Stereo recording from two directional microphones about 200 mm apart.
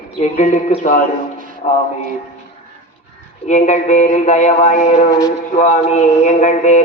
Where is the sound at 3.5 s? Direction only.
40° left (ahead or behind).